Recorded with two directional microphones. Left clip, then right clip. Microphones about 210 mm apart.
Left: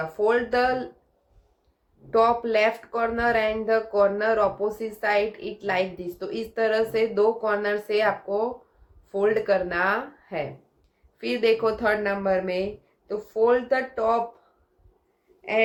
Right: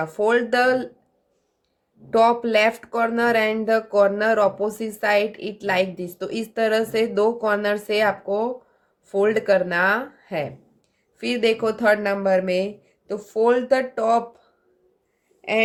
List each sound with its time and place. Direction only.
0.2 s speech: 50° right (ahead or behind)
2.0 s speech: 50° right (ahead or behind)
15.4 s speech: 50° right (ahead or behind)